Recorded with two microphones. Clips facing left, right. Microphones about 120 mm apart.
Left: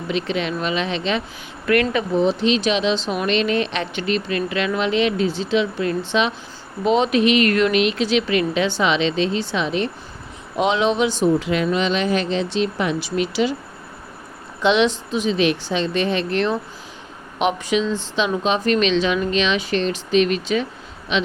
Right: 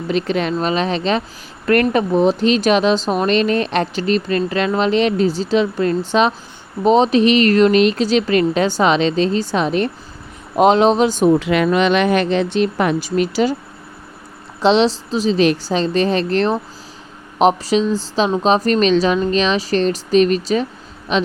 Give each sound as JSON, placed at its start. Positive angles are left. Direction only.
{"t": 0.1, "sound": "speech", "side_deg": -45}
{"t": 11.2, "sound": "speech", "side_deg": -70}
{"t": 14.6, "sound": "speech", "side_deg": -35}